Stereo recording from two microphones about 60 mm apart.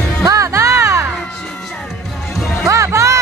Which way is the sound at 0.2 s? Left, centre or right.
Right.